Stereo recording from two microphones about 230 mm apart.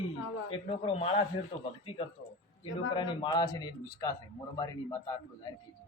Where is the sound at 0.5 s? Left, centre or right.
Left.